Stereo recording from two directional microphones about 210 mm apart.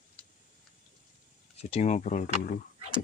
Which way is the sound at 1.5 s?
30° left (ahead or behind).